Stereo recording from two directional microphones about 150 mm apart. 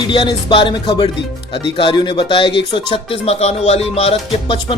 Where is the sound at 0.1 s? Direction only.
30° left (ahead or behind).